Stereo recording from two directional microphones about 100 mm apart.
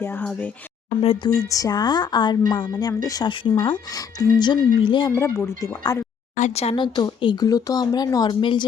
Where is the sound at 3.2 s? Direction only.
55° left (ahead or behind).